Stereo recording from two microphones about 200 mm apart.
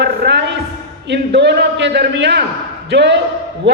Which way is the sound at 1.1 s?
60° right (ahead or behind).